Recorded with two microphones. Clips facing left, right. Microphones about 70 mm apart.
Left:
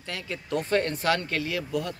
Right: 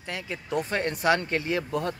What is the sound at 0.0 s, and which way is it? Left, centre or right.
Speech, centre.